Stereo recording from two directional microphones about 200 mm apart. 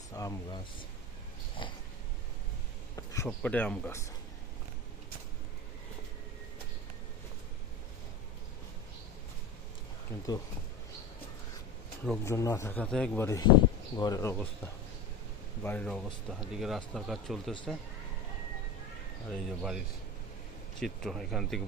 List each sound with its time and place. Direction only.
0.1 s speech: 15° left (ahead or behind)
2.9 s a sound: 15° left (ahead or behind)
3.2 s speech: 5° left (ahead or behind)
10.1 s speech: 15° left (ahead or behind)
12.2 s speech: 15° left (ahead or behind)
15.6 s speech: 5° left (ahead or behind)
19.3 s speech: centre (ahead or behind)